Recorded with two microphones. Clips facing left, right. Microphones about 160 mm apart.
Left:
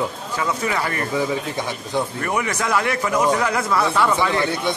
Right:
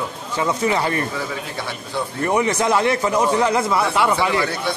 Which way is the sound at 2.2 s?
25° right (ahead or behind).